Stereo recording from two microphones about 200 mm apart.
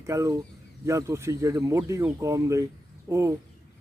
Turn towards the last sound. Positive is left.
turn(degrees=-15)  # may be behind; listen again after turning